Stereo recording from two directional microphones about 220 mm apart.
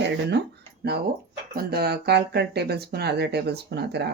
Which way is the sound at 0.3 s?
50° right (ahead or behind).